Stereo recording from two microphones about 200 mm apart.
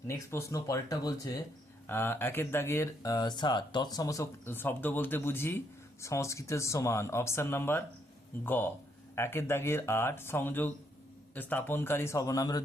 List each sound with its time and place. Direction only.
0.1 s speech: 15° left (ahead or behind)